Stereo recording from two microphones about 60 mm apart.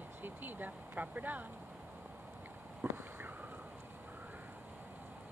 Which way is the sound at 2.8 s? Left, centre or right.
Right.